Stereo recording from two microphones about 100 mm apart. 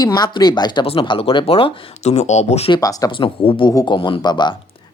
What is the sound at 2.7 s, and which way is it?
Speech, 35° left (ahead or behind).